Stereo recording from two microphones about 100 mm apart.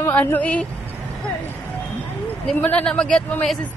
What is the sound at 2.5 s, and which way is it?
Speech, 15° left (ahead or behind).